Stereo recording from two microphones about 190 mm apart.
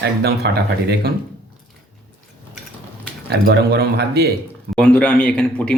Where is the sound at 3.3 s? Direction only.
60° right (ahead or behind).